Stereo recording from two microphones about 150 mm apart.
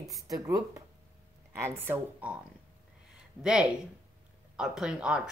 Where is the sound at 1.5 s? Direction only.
20° right (ahead or behind).